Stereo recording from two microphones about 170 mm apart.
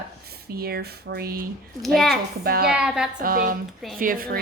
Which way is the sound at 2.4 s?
65° right (ahead or behind).